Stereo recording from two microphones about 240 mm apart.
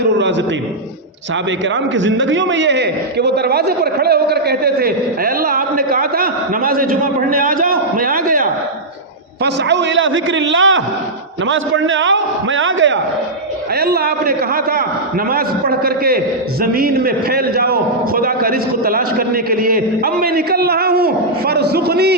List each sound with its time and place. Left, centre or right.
0.2 s a sound: right
1.6 s a man's voice: right
9.4 s a man's voice: right
13.7 s a man's voice: right